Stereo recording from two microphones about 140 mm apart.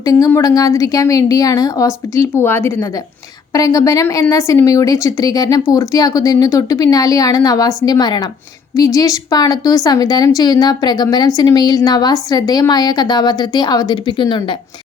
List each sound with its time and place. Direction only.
0.0 s a woman's voice: 25° left (ahead or behind)